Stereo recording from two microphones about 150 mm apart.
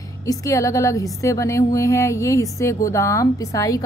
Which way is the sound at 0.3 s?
20° left (ahead or behind).